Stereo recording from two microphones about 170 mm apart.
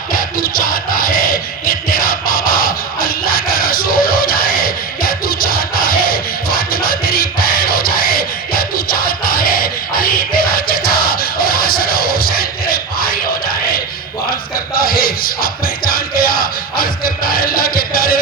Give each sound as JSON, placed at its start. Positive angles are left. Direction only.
{"t": 0.1, "sound": "music", "side_deg": 55}
{"t": 14.8, "sound": "music", "side_deg": 60}